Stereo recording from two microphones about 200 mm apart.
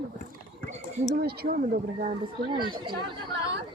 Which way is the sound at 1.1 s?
50° right (ahead or behind).